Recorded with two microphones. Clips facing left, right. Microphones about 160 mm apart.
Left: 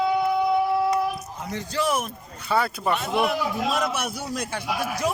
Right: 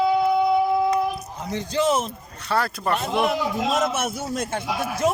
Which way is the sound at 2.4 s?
5° left (ahead or behind).